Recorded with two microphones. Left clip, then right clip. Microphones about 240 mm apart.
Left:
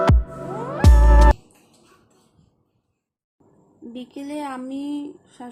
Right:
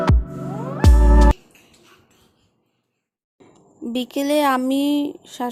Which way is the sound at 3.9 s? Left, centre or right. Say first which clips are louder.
Right 12 dB; right.